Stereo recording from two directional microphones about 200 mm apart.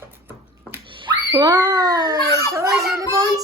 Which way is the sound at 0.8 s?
25° right (ahead or behind).